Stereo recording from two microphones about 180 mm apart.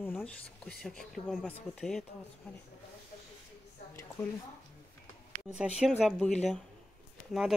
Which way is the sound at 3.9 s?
10° left (ahead or behind).